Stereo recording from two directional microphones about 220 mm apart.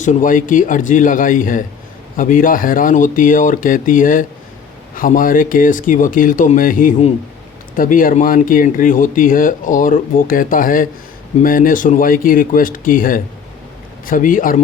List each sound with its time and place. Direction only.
0.0 s speech: 35° left (ahead or behind)